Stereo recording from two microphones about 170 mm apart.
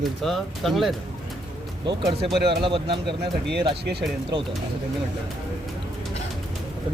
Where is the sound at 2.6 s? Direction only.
30° right (ahead or behind).